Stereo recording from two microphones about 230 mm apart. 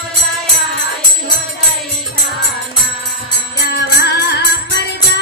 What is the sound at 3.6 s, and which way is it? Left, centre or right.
Music, left.